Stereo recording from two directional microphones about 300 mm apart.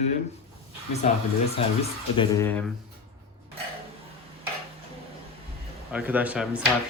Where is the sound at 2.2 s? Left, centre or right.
Centre.